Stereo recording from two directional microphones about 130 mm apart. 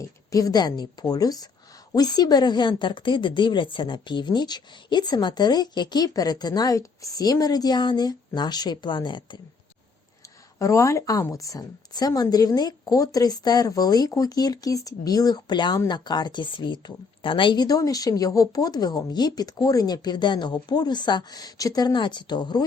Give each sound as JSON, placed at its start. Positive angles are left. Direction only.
{"t": 0.0, "sound": "a woman's voice", "side_deg": 25}
{"t": 10.2, "sound": "a woman's voice", "side_deg": 25}